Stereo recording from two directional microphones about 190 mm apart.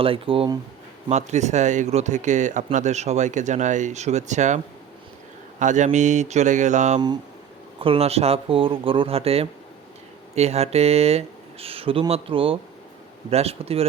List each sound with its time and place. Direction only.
0.0 s speech: 30° right (ahead or behind)